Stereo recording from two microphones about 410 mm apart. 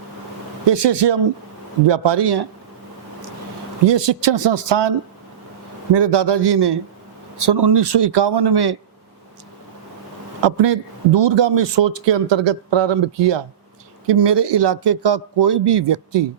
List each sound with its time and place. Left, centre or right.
0.7 s speech: right
3.8 s a man's voice: right
10.4 s a man's voice: right
14.1 s speech: right